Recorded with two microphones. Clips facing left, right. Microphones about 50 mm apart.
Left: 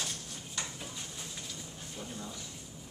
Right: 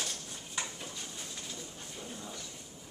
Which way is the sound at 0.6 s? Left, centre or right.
Centre.